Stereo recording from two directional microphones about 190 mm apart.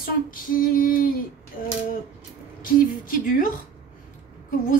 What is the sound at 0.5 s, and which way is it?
Speech, 50° left (ahead or behind).